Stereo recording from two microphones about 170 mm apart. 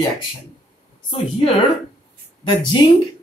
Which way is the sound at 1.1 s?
35° left (ahead or behind).